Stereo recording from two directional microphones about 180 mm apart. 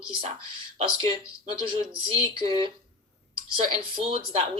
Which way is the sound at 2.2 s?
30° right (ahead or behind).